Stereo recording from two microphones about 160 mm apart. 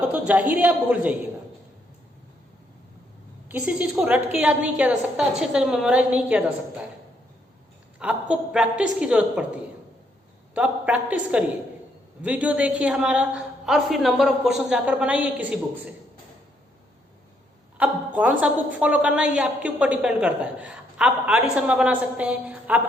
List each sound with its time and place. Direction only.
0.1 s a woman's voice: 10° right (ahead or behind)
3.5 s a woman's voice: 10° right (ahead or behind)
7.9 s a woman's voice: 5° right (ahead or behind)
10.5 s a woman's voice: 10° right (ahead or behind)
17.7 s a woman's voice: 10° right (ahead or behind)